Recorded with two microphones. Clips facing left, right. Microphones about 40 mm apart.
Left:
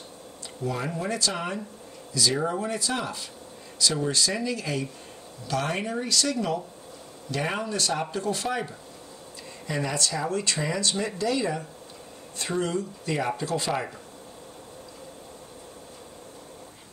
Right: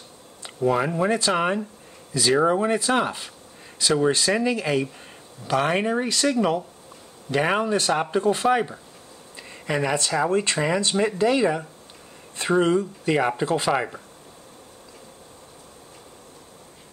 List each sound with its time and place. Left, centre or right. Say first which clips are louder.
0.6 s speech: right 9 dB; right